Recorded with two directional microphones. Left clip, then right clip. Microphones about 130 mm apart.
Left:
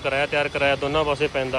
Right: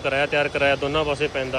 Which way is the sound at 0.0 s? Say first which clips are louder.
Right 1 dB; 15° right (ahead or behind).